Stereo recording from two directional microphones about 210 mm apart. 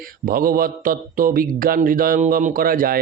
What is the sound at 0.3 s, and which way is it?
A man's voice, 45° right (ahead or behind).